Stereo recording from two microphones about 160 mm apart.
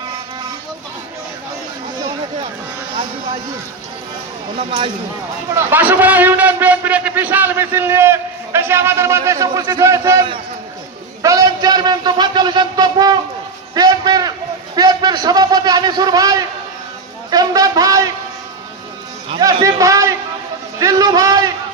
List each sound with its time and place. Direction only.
5.5 s a man's voice: 10° right (ahead or behind)
13.7 s a sound: 25° right (ahead or behind)
14.8 s a man's voice: 25° right (ahead or behind)
19.4 s a man's voice: 20° right (ahead or behind)